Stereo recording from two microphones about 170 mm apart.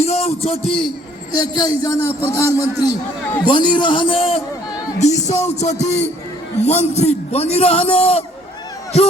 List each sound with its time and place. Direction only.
0.0 s a man's voice: 40° left (ahead or behind)
4.9 s music: 40° left (ahead or behind)
5.5 s a man's voice: 40° left (ahead or behind)